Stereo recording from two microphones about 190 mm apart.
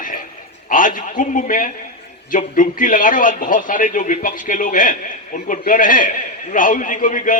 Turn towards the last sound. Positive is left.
turn(degrees=45)  # may be behind; listen again after turning